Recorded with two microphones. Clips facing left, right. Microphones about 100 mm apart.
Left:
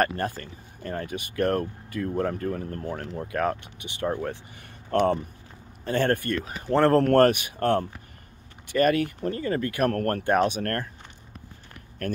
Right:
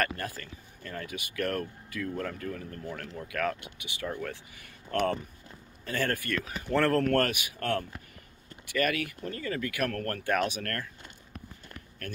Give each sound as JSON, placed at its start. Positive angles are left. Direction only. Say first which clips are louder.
{"t": 0.0, "sound": "speech", "louder": "left 6 dB", "side_deg": 35}
{"t": 4.9, "sound": "speech", "louder": "left 6 dB", "side_deg": 25}
{"t": 10.2, "sound": "speech", "louder": "left 5 dB", "side_deg": 30}